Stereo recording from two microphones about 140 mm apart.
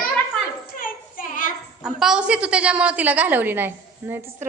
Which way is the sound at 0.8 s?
75° left (ahead or behind).